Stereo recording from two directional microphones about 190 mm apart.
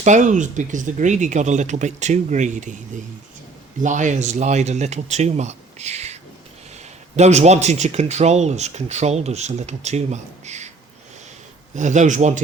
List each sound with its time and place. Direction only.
0.0 s speech: 40° right (ahead or behind)
3.8 s speech: 40° right (ahead or behind)
7.2 s speech: 35° right (ahead or behind)
11.7 s speech: 40° right (ahead or behind)